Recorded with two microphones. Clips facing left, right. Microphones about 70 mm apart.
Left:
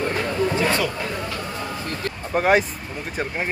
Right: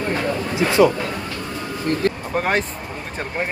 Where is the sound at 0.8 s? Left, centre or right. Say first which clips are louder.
Right 11 dB; right.